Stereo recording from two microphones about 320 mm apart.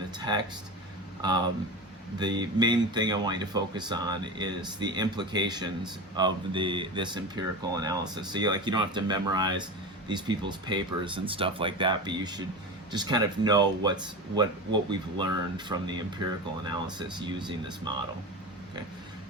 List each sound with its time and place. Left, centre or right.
0.2 s speech: centre
2.1 s speech: centre